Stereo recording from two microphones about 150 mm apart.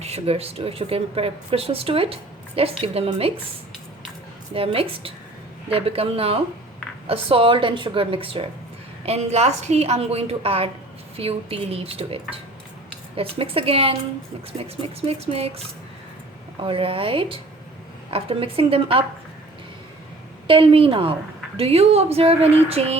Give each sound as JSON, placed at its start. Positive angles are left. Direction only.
{"t": 0.0, "sound": "speech", "side_deg": -45}
{"t": 4.5, "sound": "a woman's voice", "side_deg": -40}
{"t": 20.5, "sound": "a woman's voice", "side_deg": -35}